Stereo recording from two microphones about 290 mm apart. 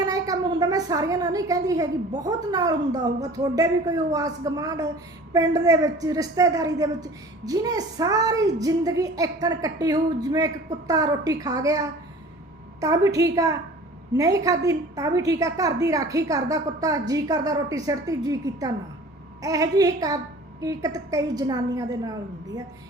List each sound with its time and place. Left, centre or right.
0.0 s a woman's voice: centre